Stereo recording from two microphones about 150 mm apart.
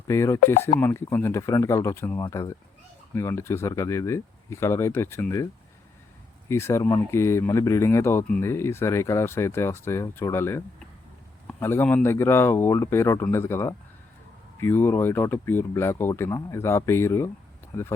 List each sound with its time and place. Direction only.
0.1 s speech: 20° left (ahead or behind)
6.5 s speech: 15° left (ahead or behind)